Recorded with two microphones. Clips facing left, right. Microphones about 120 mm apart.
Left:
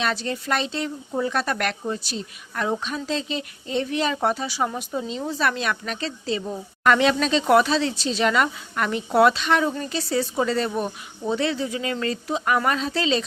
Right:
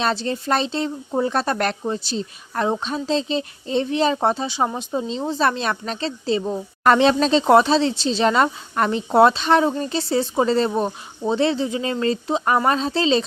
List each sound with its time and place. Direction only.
0.0 s speech: 30° right (ahead or behind)